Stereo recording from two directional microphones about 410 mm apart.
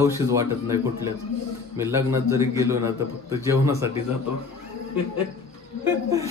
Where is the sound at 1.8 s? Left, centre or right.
Centre.